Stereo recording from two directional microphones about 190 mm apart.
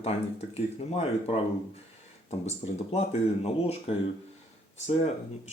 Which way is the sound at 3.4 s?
30° left (ahead or behind).